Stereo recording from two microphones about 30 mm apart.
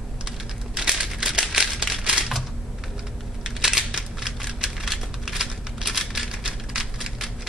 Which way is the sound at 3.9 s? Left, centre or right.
Centre.